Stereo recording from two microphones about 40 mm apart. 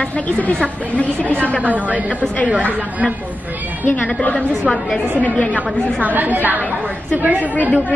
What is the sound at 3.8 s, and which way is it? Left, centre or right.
A woman's voice, left.